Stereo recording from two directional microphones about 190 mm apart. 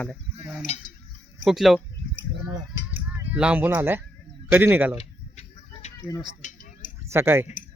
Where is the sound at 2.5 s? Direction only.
15° right (ahead or behind).